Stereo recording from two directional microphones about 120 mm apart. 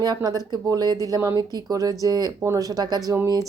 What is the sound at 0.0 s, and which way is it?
A woman's voice, 35° right (ahead or behind).